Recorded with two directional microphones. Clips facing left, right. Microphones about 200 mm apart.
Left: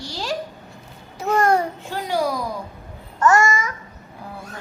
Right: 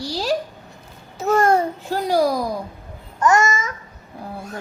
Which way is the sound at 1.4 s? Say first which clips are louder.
Right 1 dB; 25° right (ahead or behind).